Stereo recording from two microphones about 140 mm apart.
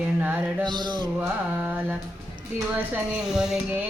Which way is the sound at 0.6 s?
30° right (ahead or behind).